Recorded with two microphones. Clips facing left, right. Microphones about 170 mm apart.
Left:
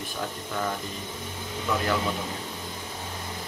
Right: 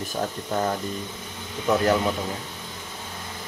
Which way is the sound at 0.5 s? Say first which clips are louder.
Right 5 dB; 40° right (ahead or behind).